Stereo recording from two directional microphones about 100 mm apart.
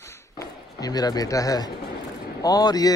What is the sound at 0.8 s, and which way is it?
Speech, 40° left (ahead or behind).